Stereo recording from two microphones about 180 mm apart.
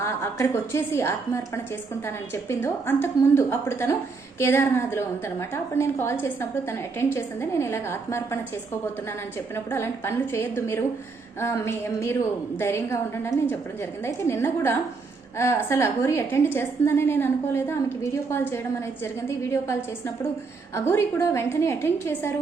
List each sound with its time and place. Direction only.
0.0 s a woman's voice: 15° left (ahead or behind)
9.6 s a woman's voice: 15° left (ahead or behind)